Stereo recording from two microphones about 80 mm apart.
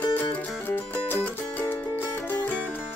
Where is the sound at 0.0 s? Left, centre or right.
Centre.